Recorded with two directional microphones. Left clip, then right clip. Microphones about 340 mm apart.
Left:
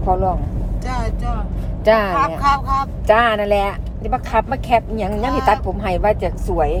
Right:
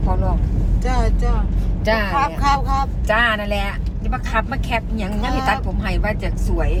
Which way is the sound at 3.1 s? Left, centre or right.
Left.